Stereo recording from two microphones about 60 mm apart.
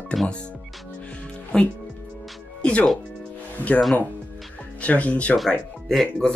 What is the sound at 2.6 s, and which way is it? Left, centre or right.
Music, left.